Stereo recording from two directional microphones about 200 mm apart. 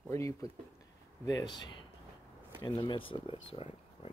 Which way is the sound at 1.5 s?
20° left (ahead or behind).